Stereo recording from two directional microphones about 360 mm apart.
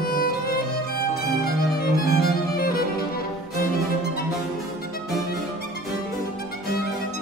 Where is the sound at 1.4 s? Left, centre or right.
Left.